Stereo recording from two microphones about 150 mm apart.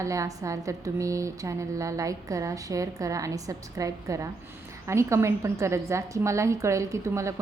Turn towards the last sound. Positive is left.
turn(degrees=-20)  # may be behind; listen again after turning